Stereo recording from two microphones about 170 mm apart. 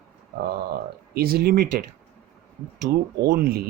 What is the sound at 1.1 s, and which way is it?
Speech, 65° right (ahead or behind).